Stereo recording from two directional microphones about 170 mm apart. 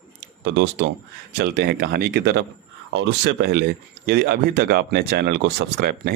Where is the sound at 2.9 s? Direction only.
90° right.